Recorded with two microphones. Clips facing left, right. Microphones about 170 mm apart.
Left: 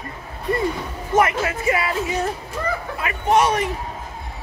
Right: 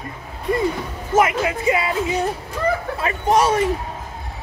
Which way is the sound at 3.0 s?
30° right (ahead or behind).